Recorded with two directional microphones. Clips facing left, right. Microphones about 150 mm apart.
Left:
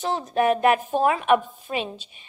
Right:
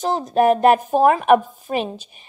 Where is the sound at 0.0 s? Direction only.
40° right (ahead or behind).